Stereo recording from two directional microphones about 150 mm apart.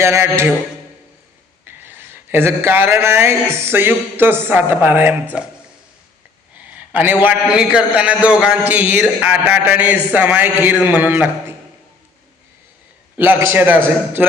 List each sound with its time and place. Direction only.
0.0 s a man's voice: 15° right (ahead or behind)
1.6 s a man's voice: 15° right (ahead or behind)
6.6 s a man's voice: 10° right (ahead or behind)
13.1 s a man's voice: 10° right (ahead or behind)